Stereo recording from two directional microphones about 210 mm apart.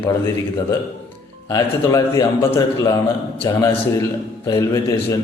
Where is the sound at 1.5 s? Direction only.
15° left (ahead or behind).